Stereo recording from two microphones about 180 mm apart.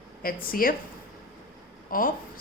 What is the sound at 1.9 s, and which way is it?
Speech, 55° left (ahead or behind).